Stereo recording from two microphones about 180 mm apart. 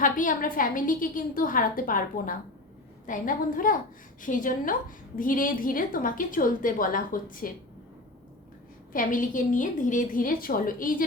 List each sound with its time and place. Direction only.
0.0 s a woman's voice: 50° left (ahead or behind)
8.9 s a woman's voice: 50° left (ahead or behind)